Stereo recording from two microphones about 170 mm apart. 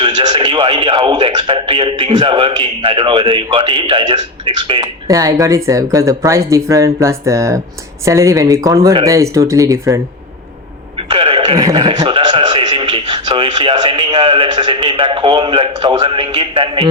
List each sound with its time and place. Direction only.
0.0 s speech: 25° right (ahead or behind)
10.9 s a sound: 35° right (ahead or behind)
11.6 s speech: 25° right (ahead or behind)